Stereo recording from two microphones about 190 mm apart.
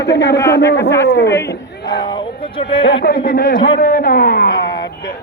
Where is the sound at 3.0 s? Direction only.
50° left (ahead or behind).